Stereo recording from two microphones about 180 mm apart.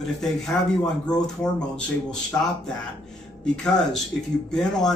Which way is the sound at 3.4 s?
5° left (ahead or behind).